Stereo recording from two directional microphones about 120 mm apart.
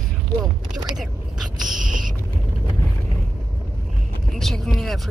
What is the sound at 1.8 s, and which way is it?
Boat, 90° right.